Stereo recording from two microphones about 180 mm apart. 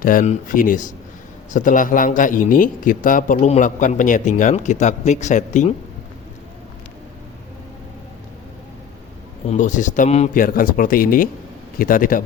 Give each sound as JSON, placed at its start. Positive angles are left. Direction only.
{"t": 0.0, "sound": "a man's voice", "side_deg": 50}
{"t": 9.5, "sound": "a man's voice", "side_deg": 45}